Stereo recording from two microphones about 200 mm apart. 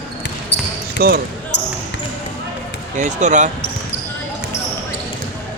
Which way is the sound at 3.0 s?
35° right (ahead or behind).